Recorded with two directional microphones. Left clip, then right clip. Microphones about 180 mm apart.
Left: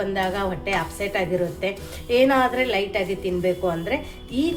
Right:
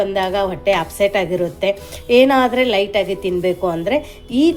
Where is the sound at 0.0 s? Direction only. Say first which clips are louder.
Right 6 dB; 40° right (ahead or behind).